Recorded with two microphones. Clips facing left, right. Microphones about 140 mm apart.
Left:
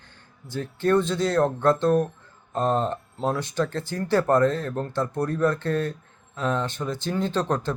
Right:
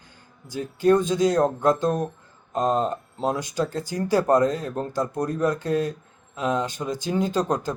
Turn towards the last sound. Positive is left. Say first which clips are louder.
# right 1 dB
turn(degrees=-15)  # may be behind; listen again after turning